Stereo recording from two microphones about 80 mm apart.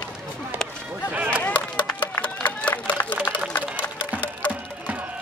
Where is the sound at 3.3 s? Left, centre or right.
Centre.